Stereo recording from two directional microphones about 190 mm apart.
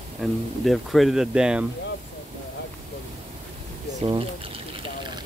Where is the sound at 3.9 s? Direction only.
30° right (ahead or behind).